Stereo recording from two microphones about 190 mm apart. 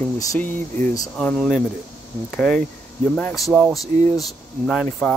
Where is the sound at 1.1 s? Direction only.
5° left (ahead or behind).